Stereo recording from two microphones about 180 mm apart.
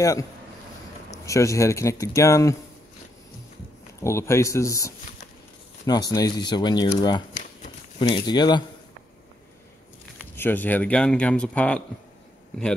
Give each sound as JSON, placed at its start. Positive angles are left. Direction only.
{"t": 0.0, "sound": "speech", "side_deg": 20}
{"t": 4.0, "sound": "speech", "side_deg": 15}
{"t": 10.1, "sound": "speech", "side_deg": 10}